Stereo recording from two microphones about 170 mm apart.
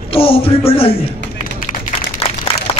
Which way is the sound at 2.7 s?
35° left (ahead or behind).